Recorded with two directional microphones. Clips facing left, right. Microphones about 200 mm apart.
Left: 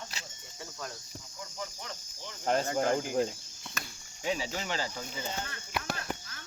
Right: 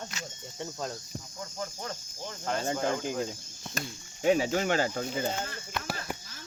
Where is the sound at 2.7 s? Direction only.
35° left (ahead or behind).